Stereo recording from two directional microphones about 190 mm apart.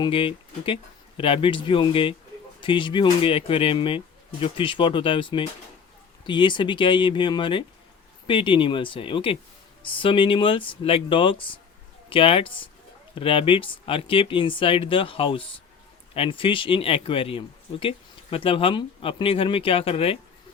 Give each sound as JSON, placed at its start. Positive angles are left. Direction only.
{"t": 0.0, "sound": "speech", "side_deg": 30}